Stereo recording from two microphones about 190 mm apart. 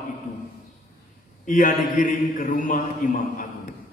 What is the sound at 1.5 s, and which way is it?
Mantra, 45° left (ahead or behind).